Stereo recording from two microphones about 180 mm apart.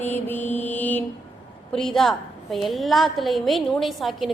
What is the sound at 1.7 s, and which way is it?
A woman's voice, 5° left (ahead or behind).